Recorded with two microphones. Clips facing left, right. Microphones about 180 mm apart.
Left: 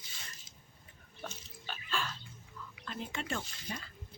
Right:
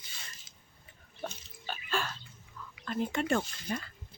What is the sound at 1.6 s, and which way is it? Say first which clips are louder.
Water: right 4 dB; 45° right (ahead or behind).